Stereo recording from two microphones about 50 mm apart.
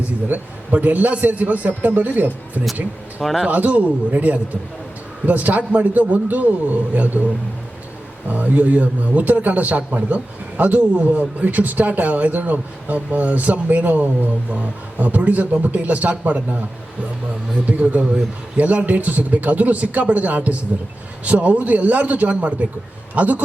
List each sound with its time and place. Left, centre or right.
0.0 s speech: right
3.2 s speech: centre
3.5 s a man's voice: right
8.3 s speech: right
17.7 s a man's voice: right